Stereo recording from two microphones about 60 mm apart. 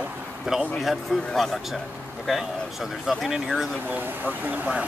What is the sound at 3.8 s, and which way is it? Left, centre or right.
Speech, right.